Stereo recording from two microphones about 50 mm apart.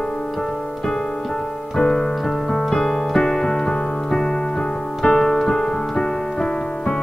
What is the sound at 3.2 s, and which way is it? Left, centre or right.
Keyboard, centre.